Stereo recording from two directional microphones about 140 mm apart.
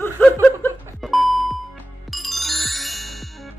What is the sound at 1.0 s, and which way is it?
Beep, centre (ahead or behind).